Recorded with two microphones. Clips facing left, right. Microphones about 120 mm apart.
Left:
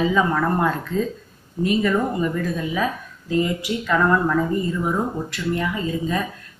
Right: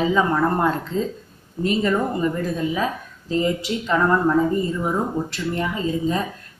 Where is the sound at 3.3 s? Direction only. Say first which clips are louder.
Even; 25° right (ahead or behind).